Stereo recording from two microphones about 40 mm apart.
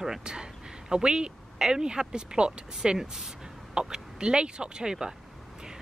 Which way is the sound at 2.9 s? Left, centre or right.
Centre.